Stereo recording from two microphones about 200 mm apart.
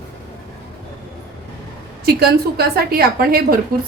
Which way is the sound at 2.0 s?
50° right (ahead or behind).